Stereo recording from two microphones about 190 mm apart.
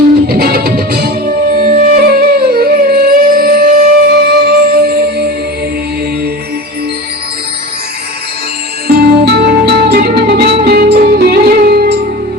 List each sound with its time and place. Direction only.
0.3 s music: 55° right (ahead or behind)
8.9 s music: 60° right (ahead or behind)